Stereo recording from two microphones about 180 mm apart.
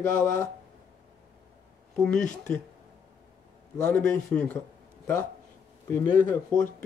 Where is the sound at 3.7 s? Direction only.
10° left (ahead or behind).